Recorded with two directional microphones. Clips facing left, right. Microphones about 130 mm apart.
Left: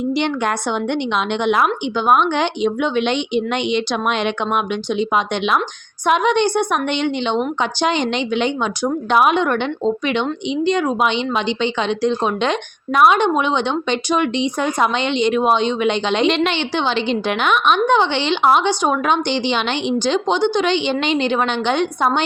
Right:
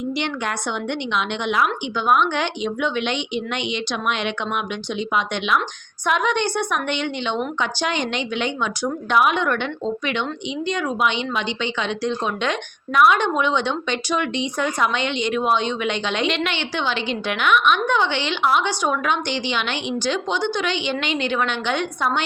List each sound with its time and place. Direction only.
0.1 s a woman's voice: 35° left (ahead or behind)
2.0 s a woman's voice: 25° left (ahead or behind)